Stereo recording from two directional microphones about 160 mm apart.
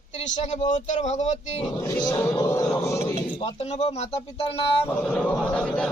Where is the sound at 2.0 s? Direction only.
20° left (ahead or behind).